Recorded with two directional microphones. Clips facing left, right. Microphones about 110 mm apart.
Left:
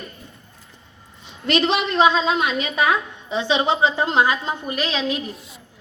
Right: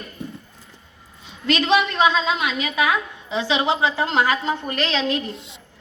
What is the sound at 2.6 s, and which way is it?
A woman's voice, 30° left (ahead or behind).